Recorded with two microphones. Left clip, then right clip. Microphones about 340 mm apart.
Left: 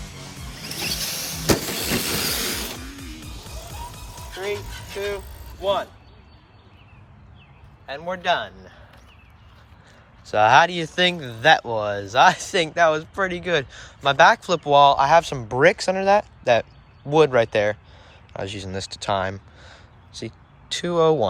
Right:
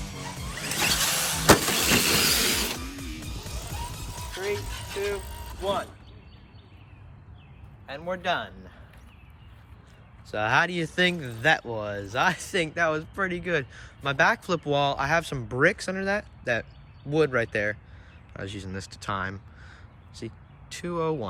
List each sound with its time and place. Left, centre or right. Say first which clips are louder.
0.6 s vehicle: right 3 dB; centre
7.9 s a man's voice: left 5 dB; left
10.3 s speech: left 9 dB; centre